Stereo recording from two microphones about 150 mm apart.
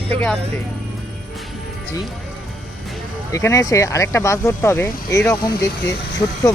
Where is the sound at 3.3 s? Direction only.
20° left (ahead or behind).